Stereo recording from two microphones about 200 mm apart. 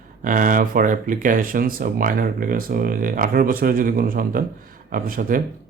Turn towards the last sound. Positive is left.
turn(degrees=-45)  # may be behind; listen again after turning